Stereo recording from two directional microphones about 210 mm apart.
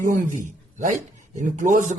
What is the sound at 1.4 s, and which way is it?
Speech, 35° right (ahead or behind).